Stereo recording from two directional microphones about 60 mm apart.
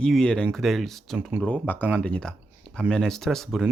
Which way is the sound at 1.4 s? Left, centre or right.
Centre.